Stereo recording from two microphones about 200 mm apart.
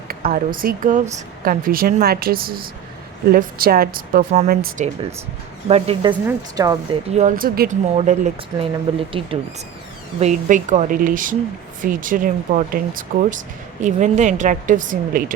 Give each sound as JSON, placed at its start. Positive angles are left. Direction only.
{"t": 0.1, "sound": "speech", "side_deg": -45}
{"t": 5.6, "sound": "speech", "side_deg": -30}
{"t": 7.1, "sound": "speech", "side_deg": -35}
{"t": 7.9, "sound": "speech", "side_deg": -35}